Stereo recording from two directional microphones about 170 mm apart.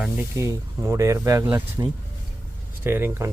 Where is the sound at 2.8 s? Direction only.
10° right (ahead or behind).